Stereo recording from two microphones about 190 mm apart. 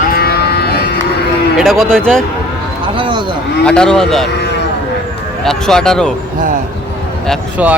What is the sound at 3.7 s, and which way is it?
Speech, 5° left (ahead or behind).